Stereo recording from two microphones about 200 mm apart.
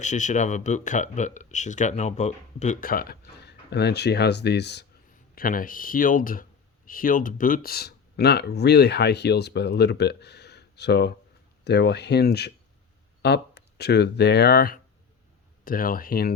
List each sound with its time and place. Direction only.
0.0 s speech: 40° left (ahead or behind); by 4.9 s 55° left (ahead or behind)
5.3 s speech: 45° left (ahead or behind)